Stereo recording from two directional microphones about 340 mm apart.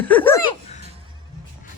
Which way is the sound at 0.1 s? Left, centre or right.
Centre.